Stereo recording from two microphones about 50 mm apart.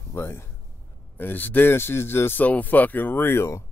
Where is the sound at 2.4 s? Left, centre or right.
Left.